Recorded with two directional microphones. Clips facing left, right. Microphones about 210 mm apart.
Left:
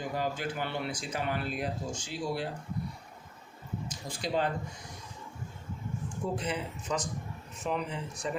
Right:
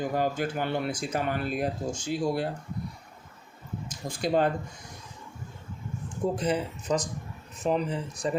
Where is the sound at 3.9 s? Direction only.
50° right (ahead or behind).